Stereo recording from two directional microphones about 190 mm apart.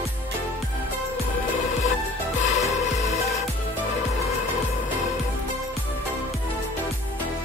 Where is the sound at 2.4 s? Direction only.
35° left (ahead or behind).